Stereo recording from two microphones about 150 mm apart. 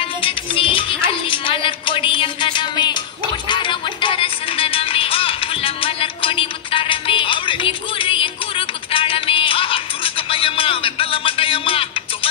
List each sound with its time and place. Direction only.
0.0 s music: 35° left (ahead or behind)